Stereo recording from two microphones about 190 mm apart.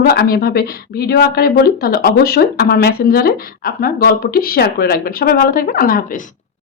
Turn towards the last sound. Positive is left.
turn(degrees=45)  # may be behind; listen again after turning